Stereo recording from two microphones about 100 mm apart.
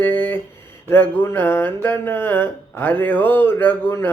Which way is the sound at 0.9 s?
20° left (ahead or behind).